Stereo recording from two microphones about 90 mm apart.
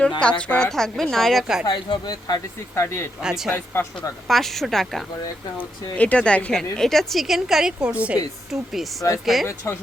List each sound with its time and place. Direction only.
0.2 s a woman's voice: 10° left (ahead or behind); by 1.6 s 5° right (ahead or behind)
1.6 s speech: 55° left (ahead or behind); by 3.1 s 30° left (ahead or behind)
3.2 s a woman's voice: 5° right (ahead or behind)
3.5 s a woman's voice: 25° left (ahead or behind)
4.3 s a woman's voice: centre (ahead or behind); by 8.2 s 15° right (ahead or behind)
8.4 s a woman's voice: centre (ahead or behind)